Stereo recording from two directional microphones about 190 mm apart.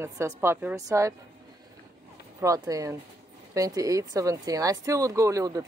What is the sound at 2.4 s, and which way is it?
Speech, 15° right (ahead or behind).